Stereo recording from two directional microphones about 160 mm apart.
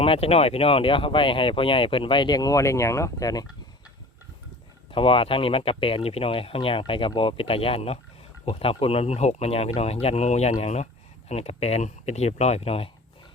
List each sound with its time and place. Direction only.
0.0 s speech: 35° left (ahead or behind)
4.9 s speech: 35° left (ahead or behind)